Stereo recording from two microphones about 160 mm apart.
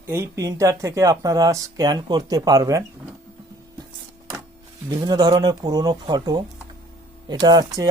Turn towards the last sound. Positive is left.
turn(degrees=-25)  # may be behind; listen again after turning